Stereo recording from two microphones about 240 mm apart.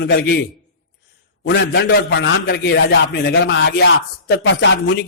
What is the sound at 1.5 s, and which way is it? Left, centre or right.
A man's voice, left.